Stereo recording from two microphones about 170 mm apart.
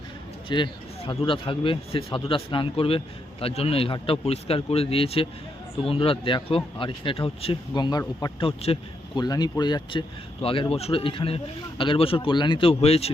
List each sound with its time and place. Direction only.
0.4 s speech: 30° left (ahead or behind)
9.2 s speech: 25° left (ahead or behind)